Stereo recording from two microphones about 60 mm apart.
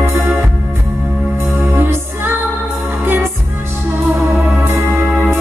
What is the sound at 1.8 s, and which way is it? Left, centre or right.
Music, right.